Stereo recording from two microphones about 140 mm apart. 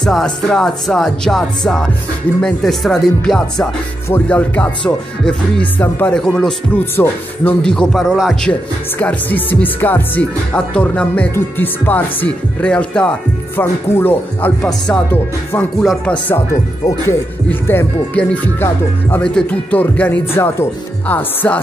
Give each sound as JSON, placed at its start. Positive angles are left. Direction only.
{"t": 0.0, "sound": "speech", "side_deg": 5}
{"t": 2.4, "sound": "speech", "side_deg": 0}
{"t": 8.9, "sound": "speech", "side_deg": 15}
{"t": 15.8, "sound": "speech", "side_deg": 0}
{"t": 16.3, "sound": "speech", "side_deg": 20}